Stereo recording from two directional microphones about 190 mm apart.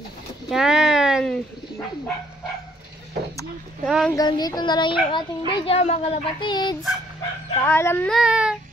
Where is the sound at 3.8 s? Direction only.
Centre (ahead or behind).